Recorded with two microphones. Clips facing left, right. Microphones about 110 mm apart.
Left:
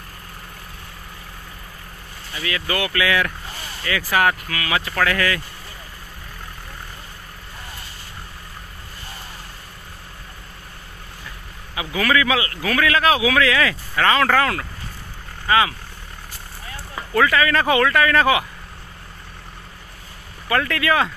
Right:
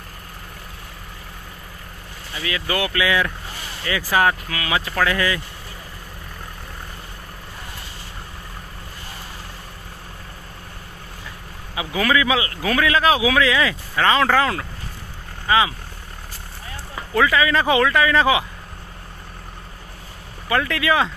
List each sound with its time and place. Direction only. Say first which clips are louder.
2.4 s a man's voice: right 1 dB; 20° right (ahead or behind)
11.7 s a man's voice: even; 20° right (ahead or behind)
17.1 s speech: even; 15° right (ahead or behind)
20.4 s speech: even; 15° right (ahead or behind)